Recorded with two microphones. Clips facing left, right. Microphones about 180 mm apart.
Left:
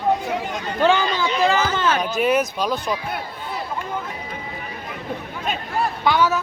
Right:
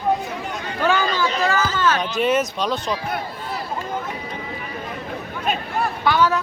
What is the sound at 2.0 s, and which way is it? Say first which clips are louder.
Speech: even; centre (ahead or behind).